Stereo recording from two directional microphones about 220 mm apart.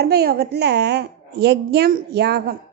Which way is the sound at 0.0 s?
45° right (ahead or behind).